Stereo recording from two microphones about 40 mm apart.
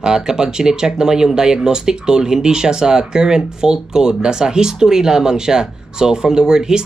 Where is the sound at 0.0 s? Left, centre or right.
Centre.